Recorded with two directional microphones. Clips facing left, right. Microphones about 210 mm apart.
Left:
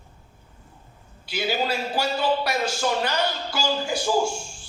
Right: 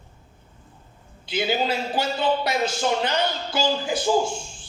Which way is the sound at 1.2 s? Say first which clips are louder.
Right 2 dB; 20° right (ahead or behind).